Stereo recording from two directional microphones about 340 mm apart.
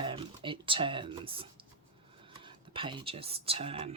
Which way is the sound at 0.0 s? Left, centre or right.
Centre.